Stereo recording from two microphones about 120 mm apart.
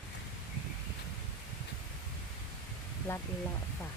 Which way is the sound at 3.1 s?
20° left (ahead or behind).